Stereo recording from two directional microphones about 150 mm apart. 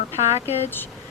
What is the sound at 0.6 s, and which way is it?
Speech, 15° left (ahead or behind).